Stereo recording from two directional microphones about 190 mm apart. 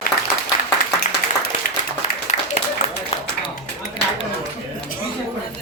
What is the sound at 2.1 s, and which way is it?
Applause, 40° left (ahead or behind).